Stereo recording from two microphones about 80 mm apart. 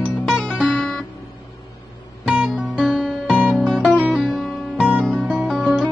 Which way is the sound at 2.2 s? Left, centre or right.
Centre.